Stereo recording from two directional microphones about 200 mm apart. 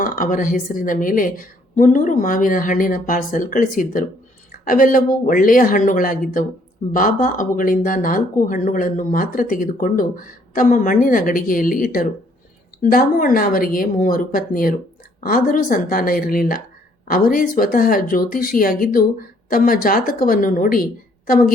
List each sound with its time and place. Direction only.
0.0 s a woman's voice: 40° left (ahead or behind)